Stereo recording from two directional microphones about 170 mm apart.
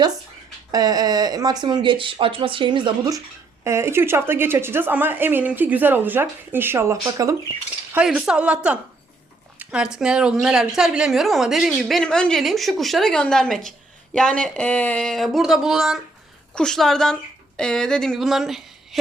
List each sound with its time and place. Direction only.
0.7 s a woman's voice: 20° right (ahead or behind)
7.9 s a woman's voice: 5° right (ahead or behind)